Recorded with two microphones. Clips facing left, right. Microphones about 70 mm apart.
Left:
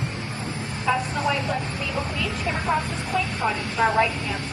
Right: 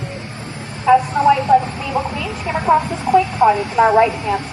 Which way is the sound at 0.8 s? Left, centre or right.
Right.